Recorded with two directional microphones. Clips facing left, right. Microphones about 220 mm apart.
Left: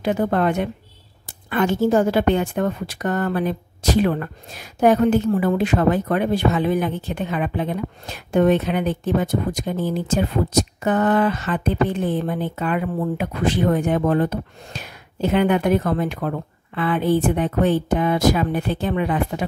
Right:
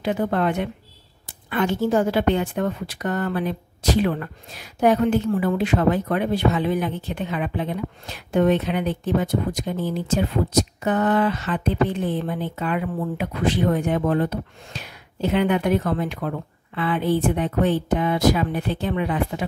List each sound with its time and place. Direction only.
0.0 s a woman's voice: 45° left (ahead or behind)